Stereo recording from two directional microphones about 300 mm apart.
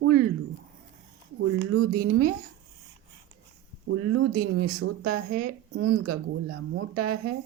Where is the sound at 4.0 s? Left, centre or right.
Right.